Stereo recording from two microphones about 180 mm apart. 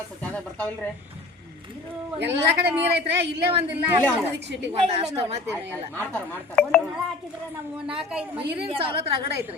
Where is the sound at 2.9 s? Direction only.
70° right (ahead or behind).